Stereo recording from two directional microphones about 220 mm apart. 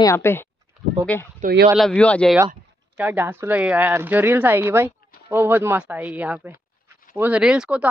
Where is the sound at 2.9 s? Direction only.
10° right (ahead or behind).